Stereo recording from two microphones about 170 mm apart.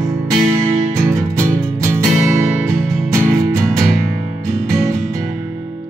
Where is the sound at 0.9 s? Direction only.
15° right (ahead or behind).